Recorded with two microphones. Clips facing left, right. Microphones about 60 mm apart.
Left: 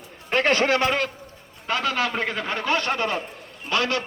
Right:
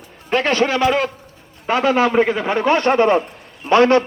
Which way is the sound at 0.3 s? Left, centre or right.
Centre.